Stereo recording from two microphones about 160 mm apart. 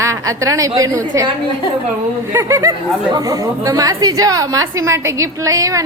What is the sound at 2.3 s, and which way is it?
A woman's voice, 20° right (ahead or behind).